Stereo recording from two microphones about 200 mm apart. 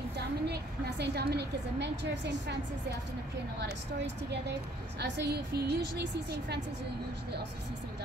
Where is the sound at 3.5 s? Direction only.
60° right (ahead or behind).